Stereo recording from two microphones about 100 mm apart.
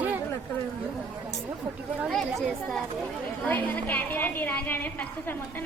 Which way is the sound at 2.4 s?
Centre (ahead or behind).